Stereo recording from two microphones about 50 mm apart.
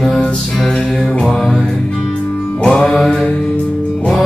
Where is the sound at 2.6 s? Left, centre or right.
Centre.